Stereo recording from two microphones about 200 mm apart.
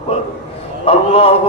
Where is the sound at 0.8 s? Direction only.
30° left (ahead or behind).